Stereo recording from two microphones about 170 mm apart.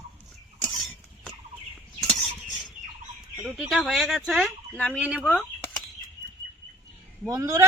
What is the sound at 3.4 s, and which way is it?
Speech, 5° right (ahead or behind).